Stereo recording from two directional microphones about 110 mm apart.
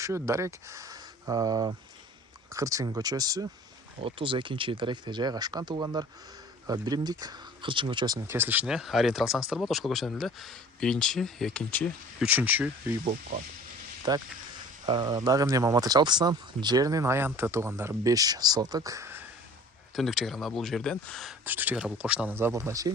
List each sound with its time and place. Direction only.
0.0 s speech: 25° right (ahead or behind)
4.0 s speech: 50° right (ahead or behind)
8.3 s speech: 20° right (ahead or behind)
8.6 s speech: 5° right (ahead or behind)
12.2 s speech: 15° right (ahead or behind)
14.1 s speech: 40° right (ahead or behind); by 19.2 s 25° right (ahead or behind)
20.0 s speech: centre (ahead or behind)
21.4 s speech: 15° right (ahead or behind)